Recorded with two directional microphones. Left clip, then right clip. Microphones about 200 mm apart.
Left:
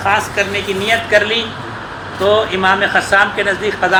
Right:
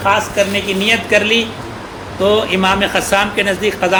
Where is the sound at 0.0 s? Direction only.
50° right (ahead or behind).